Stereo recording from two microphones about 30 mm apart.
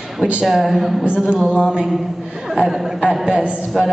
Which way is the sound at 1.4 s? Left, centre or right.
Right.